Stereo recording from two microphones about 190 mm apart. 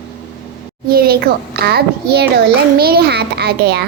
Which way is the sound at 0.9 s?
55° right (ahead or behind).